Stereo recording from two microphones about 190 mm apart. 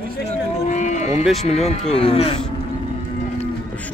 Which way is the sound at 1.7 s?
35° left (ahead or behind).